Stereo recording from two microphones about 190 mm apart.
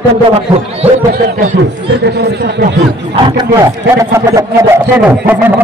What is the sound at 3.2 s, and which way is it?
Speech, 25° right (ahead or behind).